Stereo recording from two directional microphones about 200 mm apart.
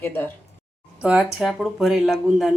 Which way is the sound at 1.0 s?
5° right (ahead or behind).